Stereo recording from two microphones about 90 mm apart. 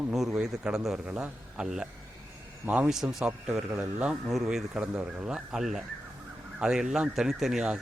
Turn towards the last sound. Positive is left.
turn(degrees=-5)  # may be behind; listen again after turning